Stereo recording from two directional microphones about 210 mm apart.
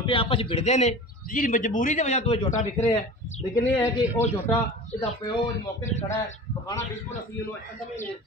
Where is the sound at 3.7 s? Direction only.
15° left (ahead or behind).